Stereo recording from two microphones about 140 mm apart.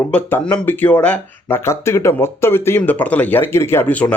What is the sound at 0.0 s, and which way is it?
Speech, 15° left (ahead or behind).